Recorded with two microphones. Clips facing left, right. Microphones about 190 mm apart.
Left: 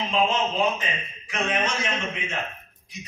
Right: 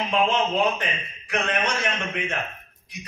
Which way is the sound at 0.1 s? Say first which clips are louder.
Right 2 dB; 60° right (ahead or behind).